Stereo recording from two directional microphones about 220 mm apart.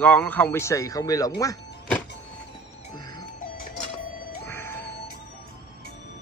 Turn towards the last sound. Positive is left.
turn(degrees=10)  # may be behind; listen again after turning